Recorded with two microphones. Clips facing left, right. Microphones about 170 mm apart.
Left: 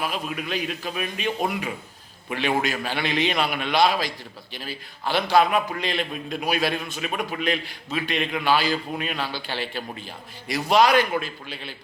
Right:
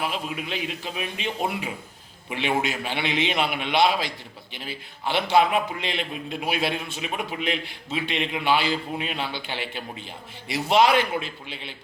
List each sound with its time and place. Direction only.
0.0 s a man's voice: 25° right (ahead or behind)